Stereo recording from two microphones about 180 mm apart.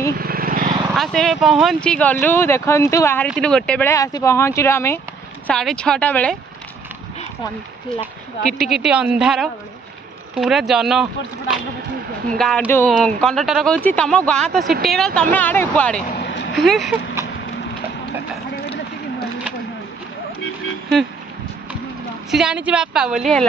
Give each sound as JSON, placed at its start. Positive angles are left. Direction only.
{"t": 0.2, "sound": "vehicle", "side_deg": -55}
{"t": 0.9, "sound": "speech", "side_deg": 0}
{"t": 3.3, "sound": "speech", "side_deg": 5}
{"t": 3.9, "sound": "speech", "side_deg": 20}
{"t": 5.5, "sound": "speech", "side_deg": 5}
{"t": 8.5, "sound": "speech", "side_deg": 0}
{"t": 16.1, "sound": "vehicle", "side_deg": 65}
{"t": 16.5, "sound": "speech", "side_deg": 0}
{"t": 22.3, "sound": "speech", "side_deg": -5}